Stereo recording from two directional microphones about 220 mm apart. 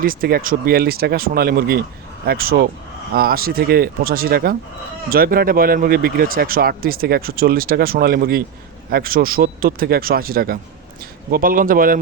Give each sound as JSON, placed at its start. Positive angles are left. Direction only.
{"t": 0.0, "sound": "speech", "side_deg": -40}